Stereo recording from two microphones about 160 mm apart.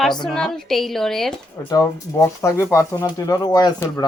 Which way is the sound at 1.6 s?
20° left (ahead or behind).